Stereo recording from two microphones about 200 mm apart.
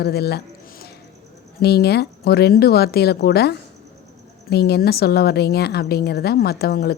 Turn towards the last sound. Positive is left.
turn(degrees=50)  # may be behind; listen again after turning